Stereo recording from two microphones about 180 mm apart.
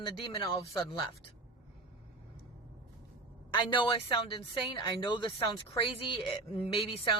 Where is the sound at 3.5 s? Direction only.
25° left (ahead or behind).